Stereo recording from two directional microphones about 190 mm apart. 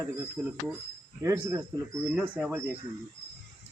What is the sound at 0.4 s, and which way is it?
Speech, 10° right (ahead or behind).